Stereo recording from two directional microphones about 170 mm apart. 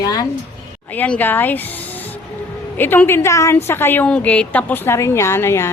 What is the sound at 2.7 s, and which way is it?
A woman's voice, 10° left (ahead or behind).